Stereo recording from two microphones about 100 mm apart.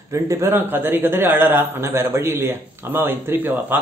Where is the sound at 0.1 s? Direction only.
30° right (ahead or behind).